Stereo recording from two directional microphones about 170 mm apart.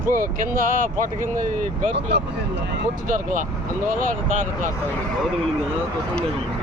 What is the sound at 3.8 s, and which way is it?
Speech, 50° right (ahead or behind).